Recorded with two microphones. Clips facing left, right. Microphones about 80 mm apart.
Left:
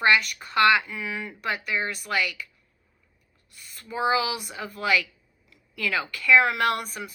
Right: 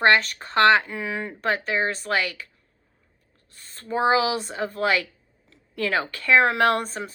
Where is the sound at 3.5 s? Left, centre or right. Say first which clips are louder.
Right 5 dB; right.